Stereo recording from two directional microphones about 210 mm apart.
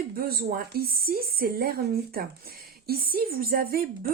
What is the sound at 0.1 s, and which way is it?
Speech, 45° right (ahead or behind).